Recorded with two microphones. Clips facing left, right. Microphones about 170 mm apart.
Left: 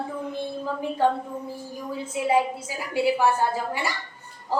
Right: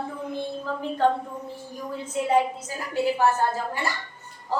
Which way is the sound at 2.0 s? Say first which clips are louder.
Even; 5° left (ahead or behind).